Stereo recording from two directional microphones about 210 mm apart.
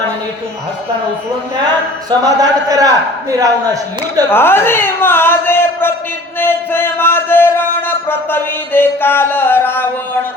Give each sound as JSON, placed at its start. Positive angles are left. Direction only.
{"t": 1.5, "sound": "speech", "side_deg": -20}
{"t": 4.3, "sound": "a man's voice", "side_deg": 10}
{"t": 6.4, "sound": "music", "side_deg": 10}